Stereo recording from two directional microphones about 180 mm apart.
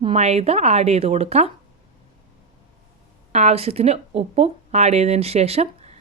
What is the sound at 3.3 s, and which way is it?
A woman's voice, 35° right (ahead or behind).